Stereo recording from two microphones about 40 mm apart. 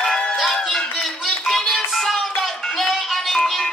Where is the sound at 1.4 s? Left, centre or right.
Centre.